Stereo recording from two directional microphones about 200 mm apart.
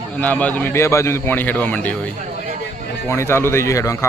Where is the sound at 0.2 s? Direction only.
5° left (ahead or behind).